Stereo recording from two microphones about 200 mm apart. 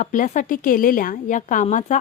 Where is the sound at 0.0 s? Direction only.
40° left (ahead or behind).